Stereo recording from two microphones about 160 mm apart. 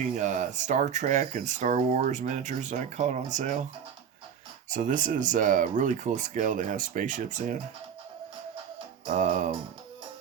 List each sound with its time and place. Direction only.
0.2 s speech: 50° right (ahead or behind)
4.7 s speech: 50° right (ahead or behind)
9.0 s speech: 55° right (ahead or behind)